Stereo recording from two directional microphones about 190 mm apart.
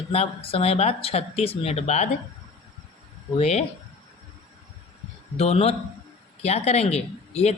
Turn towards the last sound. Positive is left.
turn(degrees=35)  # may be behind; listen again after turning